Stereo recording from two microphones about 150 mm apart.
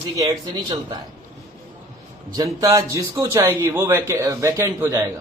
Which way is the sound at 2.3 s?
25° right (ahead or behind).